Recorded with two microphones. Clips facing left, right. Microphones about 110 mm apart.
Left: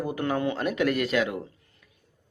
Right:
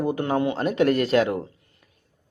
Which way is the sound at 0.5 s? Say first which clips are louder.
Right 5 dB; 30° right (ahead or behind).